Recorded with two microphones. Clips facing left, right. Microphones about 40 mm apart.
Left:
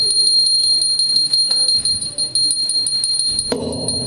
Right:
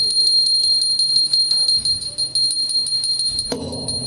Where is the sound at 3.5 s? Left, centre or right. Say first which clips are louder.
Left 5 dB; left.